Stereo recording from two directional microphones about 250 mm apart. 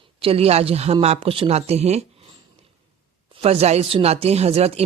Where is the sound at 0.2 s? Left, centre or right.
Right.